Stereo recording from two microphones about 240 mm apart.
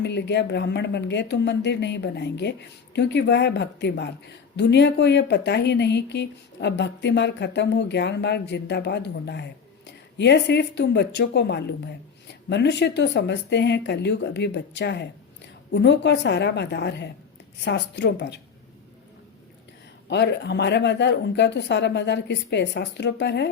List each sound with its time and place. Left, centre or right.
0.0 s a woman's voice: left
20.1 s a woman's voice: left